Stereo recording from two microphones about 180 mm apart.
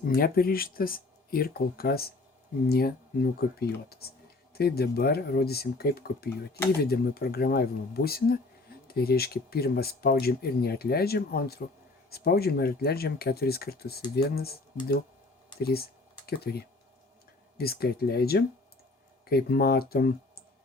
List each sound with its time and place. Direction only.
0.1 s speech: 55° left (ahead or behind)
15.6 s speech: 60° left (ahead or behind)